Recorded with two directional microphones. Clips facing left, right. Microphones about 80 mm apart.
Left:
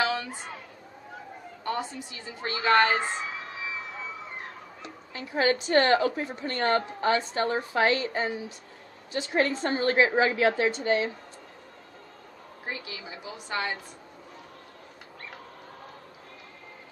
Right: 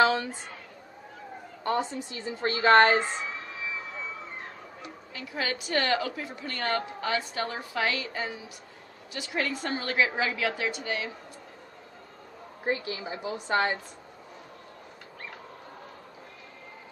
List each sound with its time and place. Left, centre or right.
0.0 s a sound: right
1.6 s a woman's voice: right
5.1 s a woman's voice: left
12.6 s a woman's voice: right